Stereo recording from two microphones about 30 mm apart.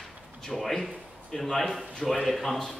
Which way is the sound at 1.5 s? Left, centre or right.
Centre.